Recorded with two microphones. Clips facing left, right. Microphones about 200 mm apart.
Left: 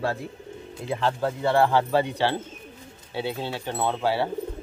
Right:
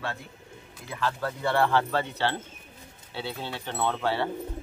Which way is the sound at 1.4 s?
15° left (ahead or behind).